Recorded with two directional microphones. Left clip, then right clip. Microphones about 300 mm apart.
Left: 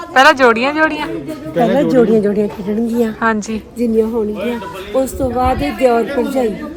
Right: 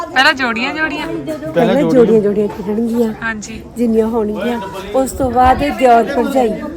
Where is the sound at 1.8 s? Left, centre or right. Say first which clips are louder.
Right 2 dB; left.